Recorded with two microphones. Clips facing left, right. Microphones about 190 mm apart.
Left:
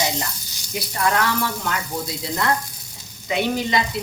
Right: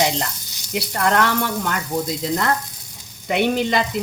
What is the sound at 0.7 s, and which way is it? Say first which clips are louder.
Speech: right 2 dB; 65° right (ahead or behind).